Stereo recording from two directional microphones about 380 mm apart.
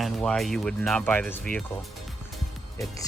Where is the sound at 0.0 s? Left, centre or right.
Centre.